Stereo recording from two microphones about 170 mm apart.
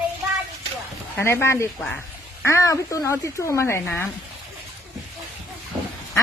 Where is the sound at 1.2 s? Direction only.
15° left (ahead or behind).